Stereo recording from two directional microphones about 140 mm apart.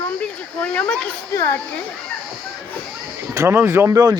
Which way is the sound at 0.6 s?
5° left (ahead or behind).